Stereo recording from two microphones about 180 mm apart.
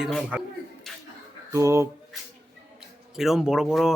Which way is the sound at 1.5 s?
15° right (ahead or behind).